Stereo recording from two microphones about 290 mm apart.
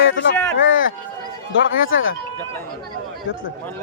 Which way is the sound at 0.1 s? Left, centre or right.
Left.